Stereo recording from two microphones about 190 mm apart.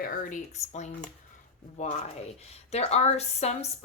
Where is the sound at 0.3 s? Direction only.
35° left (ahead or behind).